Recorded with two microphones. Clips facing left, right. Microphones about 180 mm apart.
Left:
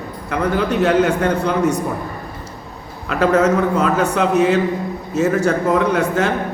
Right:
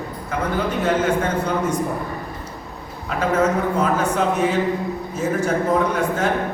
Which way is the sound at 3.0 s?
75° left (ahead or behind).